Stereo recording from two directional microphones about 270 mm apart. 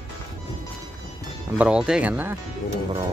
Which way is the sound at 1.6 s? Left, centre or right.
Centre.